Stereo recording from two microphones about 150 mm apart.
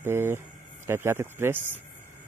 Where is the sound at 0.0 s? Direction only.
15° right (ahead or behind).